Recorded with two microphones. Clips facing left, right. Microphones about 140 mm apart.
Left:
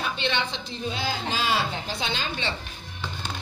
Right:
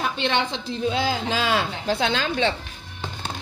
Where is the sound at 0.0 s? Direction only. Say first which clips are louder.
Right 4 dB; 90° right.